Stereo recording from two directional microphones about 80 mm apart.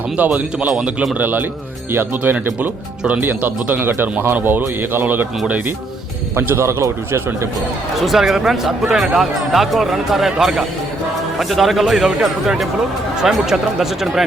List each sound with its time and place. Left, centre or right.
0.3 s speech: centre
6.3 s a man's voice: right
7.9 s speech: centre